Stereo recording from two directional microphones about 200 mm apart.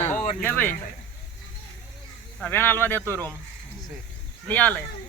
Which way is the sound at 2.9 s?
15° right (ahead or behind).